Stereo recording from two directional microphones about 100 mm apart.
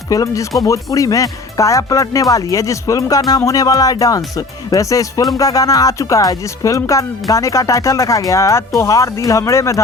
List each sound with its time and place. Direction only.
0.1 s speech: 35° left (ahead or behind)